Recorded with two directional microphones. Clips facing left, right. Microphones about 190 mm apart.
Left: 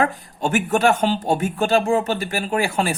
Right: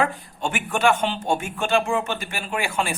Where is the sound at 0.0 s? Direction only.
40° left (ahead or behind).